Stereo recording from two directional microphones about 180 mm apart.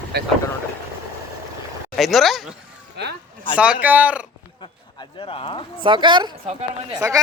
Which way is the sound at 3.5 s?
5° right (ahead or behind).